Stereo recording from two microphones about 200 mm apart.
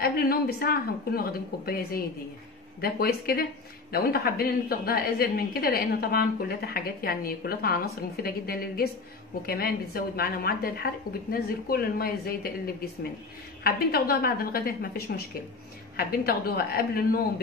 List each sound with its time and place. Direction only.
0.0 s a woman's voice: 50° left (ahead or behind)